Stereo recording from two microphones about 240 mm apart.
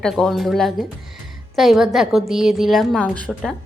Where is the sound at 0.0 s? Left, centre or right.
Centre.